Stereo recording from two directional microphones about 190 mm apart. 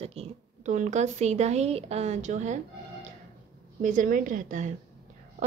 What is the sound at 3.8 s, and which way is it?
Speech, 45° right (ahead or behind).